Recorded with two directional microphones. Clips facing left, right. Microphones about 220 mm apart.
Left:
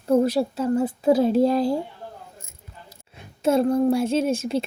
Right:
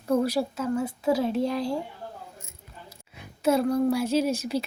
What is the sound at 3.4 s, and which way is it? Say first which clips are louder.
Speech: left 3 dB; 25° left (ahead or behind).